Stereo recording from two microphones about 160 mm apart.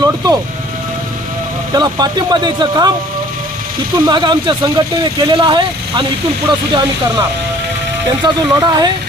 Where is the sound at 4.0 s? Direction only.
30° right (ahead or behind).